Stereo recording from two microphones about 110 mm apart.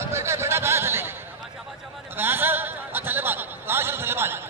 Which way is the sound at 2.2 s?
20° right (ahead or behind).